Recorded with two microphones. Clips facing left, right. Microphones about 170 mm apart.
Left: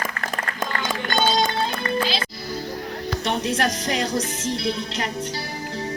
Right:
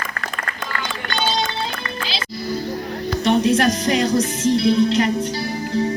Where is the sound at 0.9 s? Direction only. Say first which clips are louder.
Left 2 dB; 45° left (ahead or behind).